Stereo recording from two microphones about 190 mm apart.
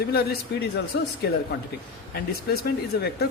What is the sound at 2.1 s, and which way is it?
A woman's voice, 55° left (ahead or behind).